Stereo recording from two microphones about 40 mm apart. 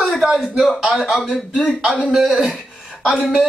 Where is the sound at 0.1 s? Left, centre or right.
Centre.